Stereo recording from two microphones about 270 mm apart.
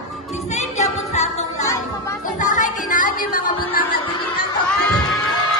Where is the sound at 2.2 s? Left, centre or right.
Left.